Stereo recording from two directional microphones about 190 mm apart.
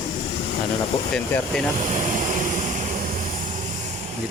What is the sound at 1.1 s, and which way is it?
Speech, 5° left (ahead or behind).